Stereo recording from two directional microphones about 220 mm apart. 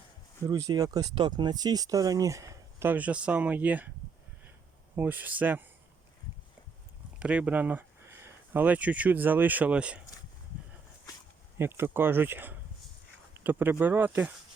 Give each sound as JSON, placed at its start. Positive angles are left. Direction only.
{"t": 0.4, "sound": "speech", "side_deg": -15}
{"t": 4.9, "sound": "speech", "side_deg": -10}
{"t": 7.2, "sound": "speech", "side_deg": -5}
{"t": 11.5, "sound": "speech", "side_deg": -10}